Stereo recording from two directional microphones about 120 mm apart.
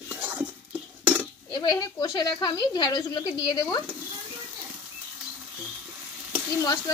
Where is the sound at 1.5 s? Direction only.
35° left (ahead or behind).